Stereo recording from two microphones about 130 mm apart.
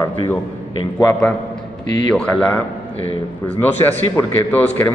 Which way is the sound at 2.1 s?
10° left (ahead or behind).